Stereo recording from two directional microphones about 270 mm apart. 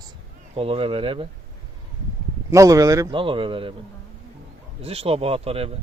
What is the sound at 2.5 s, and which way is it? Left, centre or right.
Speech, centre.